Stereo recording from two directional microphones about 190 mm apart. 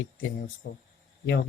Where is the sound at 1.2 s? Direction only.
60° left (ahead or behind).